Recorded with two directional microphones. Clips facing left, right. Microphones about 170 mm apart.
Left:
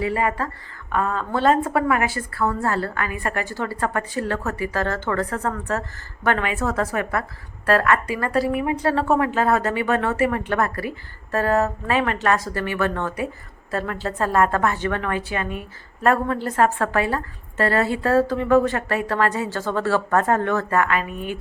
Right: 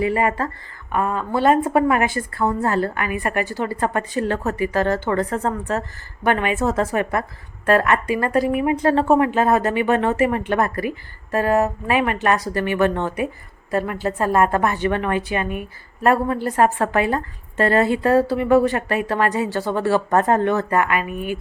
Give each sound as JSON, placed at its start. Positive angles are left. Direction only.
{"t": 0.0, "sound": "a woman's voice", "side_deg": -20}